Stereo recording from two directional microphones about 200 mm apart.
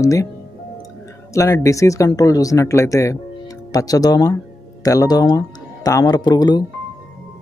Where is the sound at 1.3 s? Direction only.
15° left (ahead or behind).